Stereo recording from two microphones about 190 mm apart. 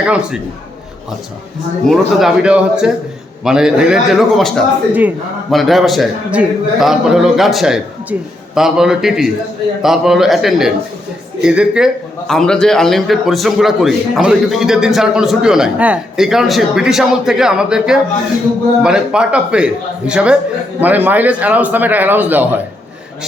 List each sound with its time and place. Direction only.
0.0 s a man's voice: 5° right (ahead or behind)
1.9 s a man's voice: 5° right (ahead or behind)